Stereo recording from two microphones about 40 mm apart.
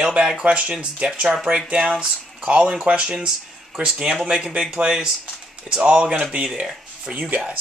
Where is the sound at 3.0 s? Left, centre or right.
Centre.